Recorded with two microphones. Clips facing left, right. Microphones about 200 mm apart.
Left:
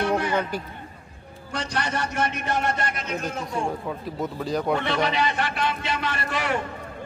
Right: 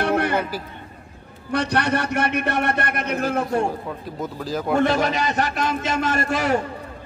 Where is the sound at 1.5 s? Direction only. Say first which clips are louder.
Right 7 dB; 65° right (ahead or behind).